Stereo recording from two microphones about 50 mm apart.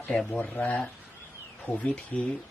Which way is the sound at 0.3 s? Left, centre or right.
Left.